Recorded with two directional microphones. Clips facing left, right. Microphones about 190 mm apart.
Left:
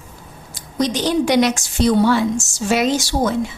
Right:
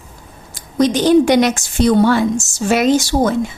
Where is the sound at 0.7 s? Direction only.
50° right (ahead or behind).